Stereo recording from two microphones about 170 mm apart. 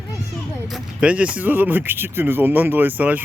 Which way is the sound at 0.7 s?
5° right (ahead or behind).